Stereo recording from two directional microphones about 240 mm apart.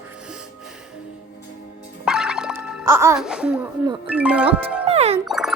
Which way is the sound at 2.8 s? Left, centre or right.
Centre.